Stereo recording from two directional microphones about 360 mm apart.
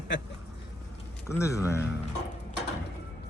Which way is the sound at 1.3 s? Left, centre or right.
Centre.